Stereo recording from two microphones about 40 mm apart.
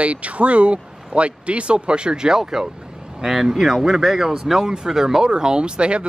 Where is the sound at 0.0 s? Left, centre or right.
Right.